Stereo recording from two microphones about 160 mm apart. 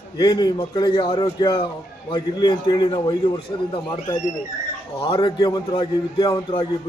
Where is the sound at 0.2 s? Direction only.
25° left (ahead or behind).